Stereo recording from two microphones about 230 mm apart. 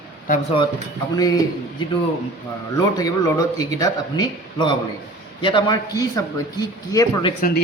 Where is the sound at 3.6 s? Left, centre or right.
Centre.